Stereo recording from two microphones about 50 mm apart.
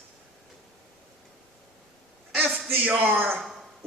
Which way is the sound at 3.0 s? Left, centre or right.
Right.